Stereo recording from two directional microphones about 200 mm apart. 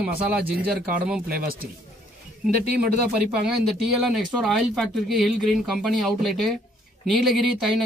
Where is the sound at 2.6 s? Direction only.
45° right (ahead or behind).